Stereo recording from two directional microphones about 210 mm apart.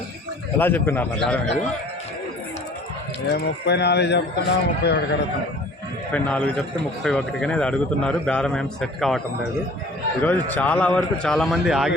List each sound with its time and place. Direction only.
0.6 s a man's voice: 10° left (ahead or behind)
3.3 s a man's voice: 55° left (ahead or behind)
6.1 s a man's voice: 5° left (ahead or behind)